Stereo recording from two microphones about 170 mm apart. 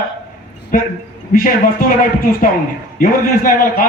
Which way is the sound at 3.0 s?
60° left (ahead or behind).